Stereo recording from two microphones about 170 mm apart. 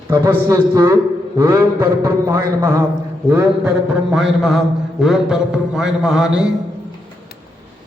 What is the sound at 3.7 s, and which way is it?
A man's voice, 5° right (ahead or behind).